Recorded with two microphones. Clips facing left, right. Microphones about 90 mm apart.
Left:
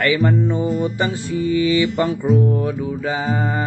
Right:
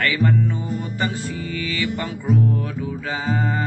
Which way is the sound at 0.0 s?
20° left (ahead or behind).